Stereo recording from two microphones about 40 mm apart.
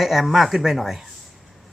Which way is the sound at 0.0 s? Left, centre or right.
Centre.